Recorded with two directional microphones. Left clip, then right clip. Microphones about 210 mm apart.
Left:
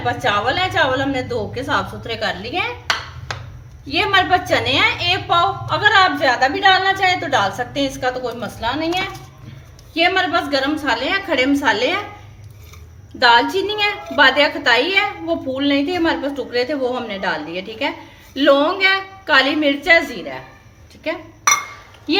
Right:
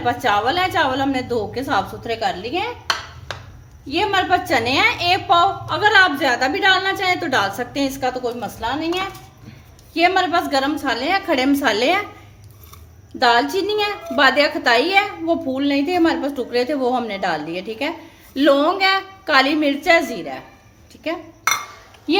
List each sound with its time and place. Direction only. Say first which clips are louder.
0.0 s a woman's voice: even; 35° right (ahead or behind)
3.8 s a woman's voice: left 2 dB; 20° right (ahead or behind); by 12.0 s 45° right (ahead or behind)
13.1 s a woman's voice: left 3 dB; 25° right (ahead or behind)